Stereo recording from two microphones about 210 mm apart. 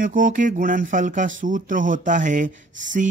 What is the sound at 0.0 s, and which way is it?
Speech, 40° right (ahead or behind).